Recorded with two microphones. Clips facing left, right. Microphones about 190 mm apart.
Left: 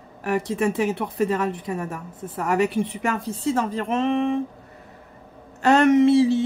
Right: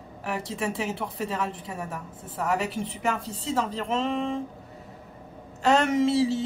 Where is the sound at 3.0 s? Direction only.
55° left (ahead or behind).